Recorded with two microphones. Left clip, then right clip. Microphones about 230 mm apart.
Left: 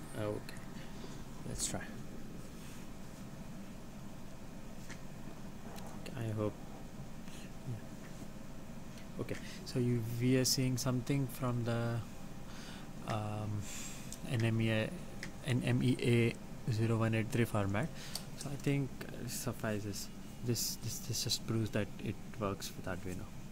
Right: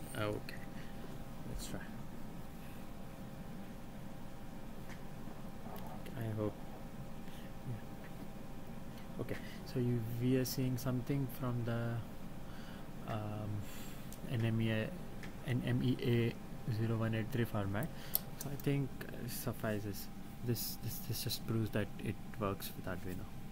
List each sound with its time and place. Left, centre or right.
0.2 s speech: centre
6.1 s a sound: centre
9.2 s speech: centre
13.0 s a sound: left
14.3 s speech: centre
19.2 s speech: centre